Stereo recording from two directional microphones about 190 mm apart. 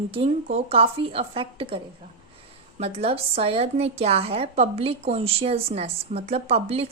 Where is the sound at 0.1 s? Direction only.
30° right (ahead or behind).